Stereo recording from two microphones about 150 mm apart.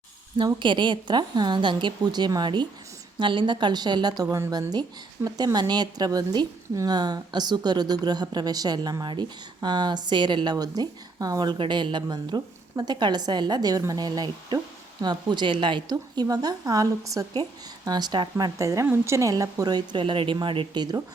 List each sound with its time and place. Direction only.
0.3 s a woman's voice: 30° right (ahead or behind)